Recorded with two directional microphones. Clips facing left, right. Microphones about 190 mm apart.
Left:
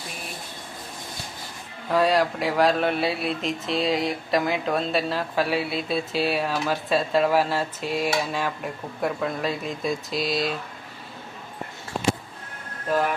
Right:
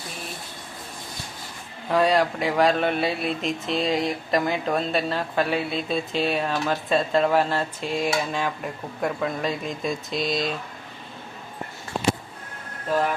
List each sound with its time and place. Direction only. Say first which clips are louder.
1.9 s speech: even; centre (ahead or behind)